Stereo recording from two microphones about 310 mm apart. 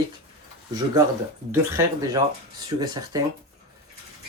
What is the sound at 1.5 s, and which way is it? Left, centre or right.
Speech, centre.